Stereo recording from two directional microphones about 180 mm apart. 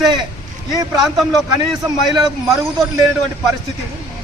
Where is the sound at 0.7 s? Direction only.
20° right (ahead or behind).